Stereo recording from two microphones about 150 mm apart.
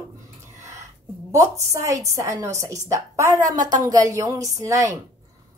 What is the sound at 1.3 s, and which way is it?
A woman's voice, 20° right (ahead or behind).